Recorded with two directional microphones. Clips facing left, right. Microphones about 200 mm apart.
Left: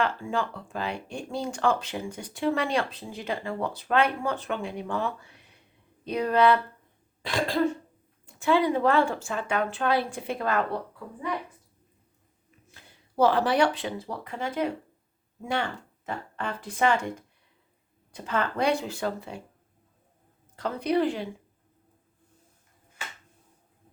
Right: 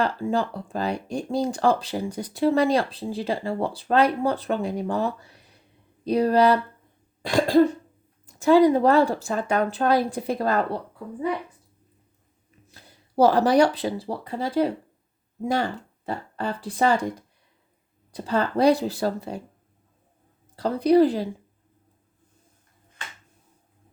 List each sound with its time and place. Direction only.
0.0 s speech: 35° right (ahead or behind)
7.2 s cough: 40° right (ahead or behind)
8.3 s speech: 40° right (ahead or behind)
12.7 s speech: 35° right (ahead or behind)
20.6 s speech: 35° right (ahead or behind)